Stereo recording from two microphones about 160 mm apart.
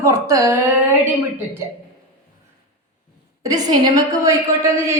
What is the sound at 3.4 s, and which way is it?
A woman's voice, 20° right (ahead or behind).